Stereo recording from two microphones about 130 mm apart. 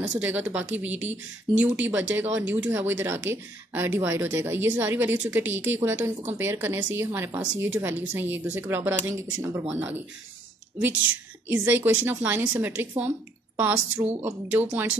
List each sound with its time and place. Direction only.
0.2 s speech: 15° right (ahead or behind)
11.4 s speech: 15° right (ahead or behind)